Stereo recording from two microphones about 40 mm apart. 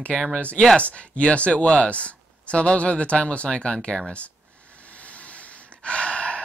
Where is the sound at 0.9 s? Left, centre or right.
Left.